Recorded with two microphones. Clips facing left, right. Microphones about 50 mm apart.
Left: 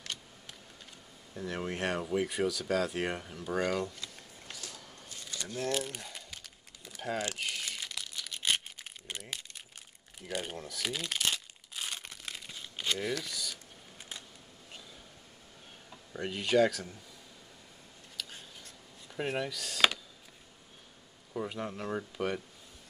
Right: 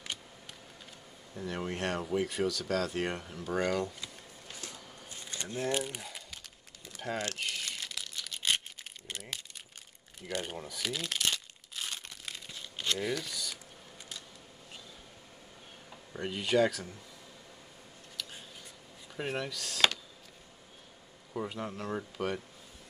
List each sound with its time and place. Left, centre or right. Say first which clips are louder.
1.3 s speech: even; centre
4.7 s crumpling: right 1 dB; right; by 9.5 s centre
10.2 s speech: right 1 dB; centre
10.8 s crumpling: even; centre
13.1 s speech: even; centre
16.1 s speech: left 1 dB; centre
19.1 s speech: left 2 dB; centre
21.3 s speech: even; centre